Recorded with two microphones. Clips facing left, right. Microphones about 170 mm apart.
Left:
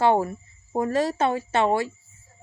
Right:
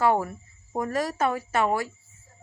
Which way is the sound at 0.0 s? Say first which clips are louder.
Left 3 dB; 25° left (ahead or behind).